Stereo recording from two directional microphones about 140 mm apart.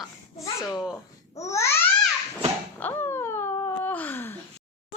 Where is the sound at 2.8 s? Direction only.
15° left (ahead or behind).